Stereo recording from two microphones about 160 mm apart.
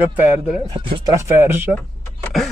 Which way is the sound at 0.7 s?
30° right (ahead or behind).